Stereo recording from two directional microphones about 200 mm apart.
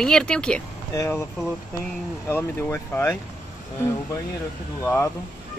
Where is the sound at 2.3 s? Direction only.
10° left (ahead or behind).